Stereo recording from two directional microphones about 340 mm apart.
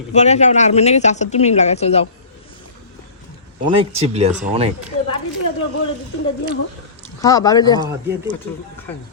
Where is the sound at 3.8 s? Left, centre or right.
Centre.